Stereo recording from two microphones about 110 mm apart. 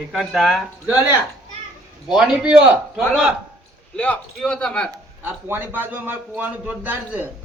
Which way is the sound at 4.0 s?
10° left (ahead or behind).